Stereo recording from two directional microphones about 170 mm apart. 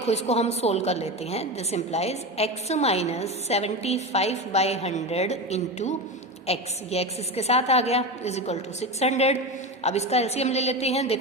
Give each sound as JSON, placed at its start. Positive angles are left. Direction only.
{"t": 0.0, "sound": "a woman's voice", "side_deg": 40}